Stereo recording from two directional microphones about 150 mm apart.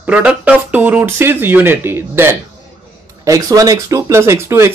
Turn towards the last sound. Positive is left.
turn(degrees=-15)  # may be behind; listen again after turning